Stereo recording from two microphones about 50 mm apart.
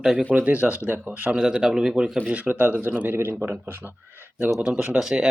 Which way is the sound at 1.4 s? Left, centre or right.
Centre.